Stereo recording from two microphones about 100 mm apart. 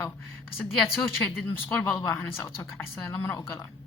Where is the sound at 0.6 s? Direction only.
Centre (ahead or behind).